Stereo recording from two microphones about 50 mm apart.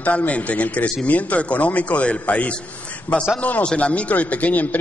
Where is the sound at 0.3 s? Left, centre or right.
Left.